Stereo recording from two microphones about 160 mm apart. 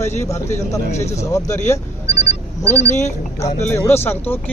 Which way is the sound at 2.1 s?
90° left.